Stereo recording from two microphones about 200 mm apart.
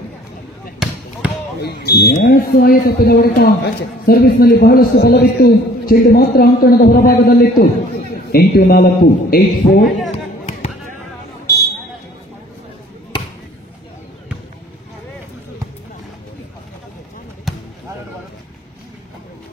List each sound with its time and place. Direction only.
1.6 s a man's voice: 55° left (ahead or behind)
9.8 s speech: centre (ahead or behind)
10.1 s music: 30° left (ahead or behind)
17.5 s basketball bounce: centre (ahead or behind)